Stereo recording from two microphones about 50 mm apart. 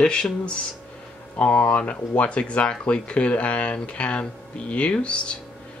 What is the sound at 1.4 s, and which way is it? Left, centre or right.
Speech, left.